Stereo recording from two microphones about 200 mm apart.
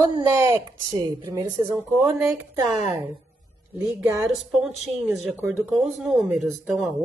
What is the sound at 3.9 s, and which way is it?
Speech, 5° right (ahead or behind).